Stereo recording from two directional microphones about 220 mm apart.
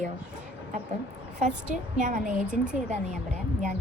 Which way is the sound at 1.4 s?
35° right (ahead or behind).